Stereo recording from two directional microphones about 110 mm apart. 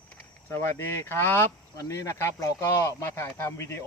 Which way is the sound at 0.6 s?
20° left (ahead or behind).